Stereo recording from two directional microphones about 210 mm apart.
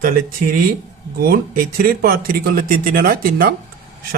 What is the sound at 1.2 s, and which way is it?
Speech, 45° right (ahead or behind).